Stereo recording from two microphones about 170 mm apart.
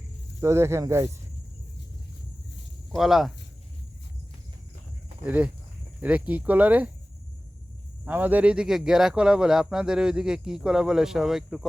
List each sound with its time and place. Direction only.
0.3 s speech: 15° right (ahead or behind)
2.9 s speech: centre (ahead or behind)
5.2 s speech: 10° right (ahead or behind)
8.0 s speech: 10° right (ahead or behind)